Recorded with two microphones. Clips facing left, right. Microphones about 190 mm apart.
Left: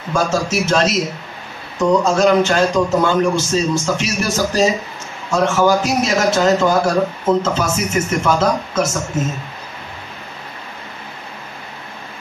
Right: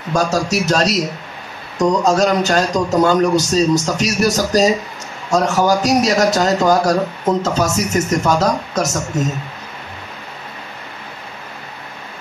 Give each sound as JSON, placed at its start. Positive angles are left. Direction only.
{"t": 0.1, "sound": "a man's voice", "side_deg": -40}